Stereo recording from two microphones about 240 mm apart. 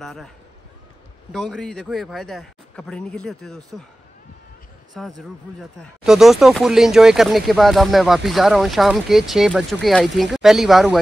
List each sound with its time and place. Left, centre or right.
0.0 s speech: centre
1.3 s speech: centre
4.9 s speech: centre